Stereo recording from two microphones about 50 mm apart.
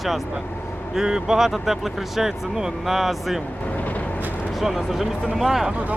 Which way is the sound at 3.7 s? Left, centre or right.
Left.